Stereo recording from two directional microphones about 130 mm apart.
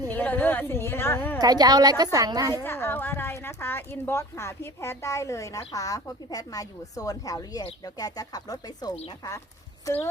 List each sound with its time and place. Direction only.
0.1 s a woman's voice: 15° left (ahead or behind)
1.4 s a woman's voice: 30° right (ahead or behind)
2.6 s speech: 15° left (ahead or behind)
9.8 s speech: 20° left (ahead or behind)